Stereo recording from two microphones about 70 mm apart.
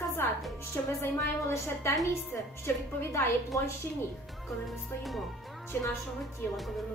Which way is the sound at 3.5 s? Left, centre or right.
Left.